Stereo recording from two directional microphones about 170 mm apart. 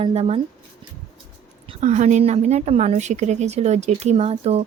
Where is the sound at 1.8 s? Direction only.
45° right (ahead or behind).